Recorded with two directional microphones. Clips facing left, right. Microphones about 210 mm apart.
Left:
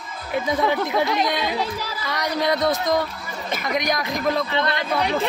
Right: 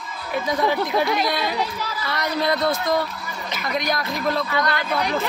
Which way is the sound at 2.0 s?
15° left (ahead or behind).